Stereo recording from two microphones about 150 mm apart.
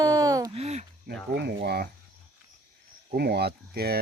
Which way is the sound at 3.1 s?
90° right.